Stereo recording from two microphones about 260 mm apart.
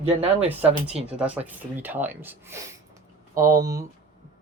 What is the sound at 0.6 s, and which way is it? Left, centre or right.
Speech, right.